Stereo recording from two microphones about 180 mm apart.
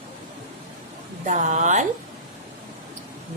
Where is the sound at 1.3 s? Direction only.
40° right (ahead or behind).